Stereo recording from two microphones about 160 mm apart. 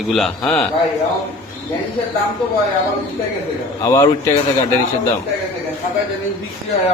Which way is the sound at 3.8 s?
20° left (ahead or behind).